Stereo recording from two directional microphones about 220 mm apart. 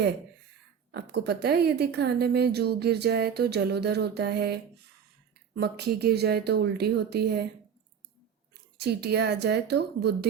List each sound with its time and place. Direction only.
0.9 s a woman's voice: 50° right (ahead or behind)
8.8 s a woman's voice: 50° right (ahead or behind)